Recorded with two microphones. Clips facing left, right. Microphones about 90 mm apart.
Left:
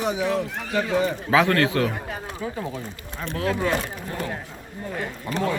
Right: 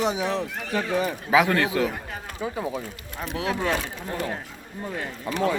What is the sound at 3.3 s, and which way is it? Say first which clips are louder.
Speech: left 2 dB; 15° right (ahead or behind).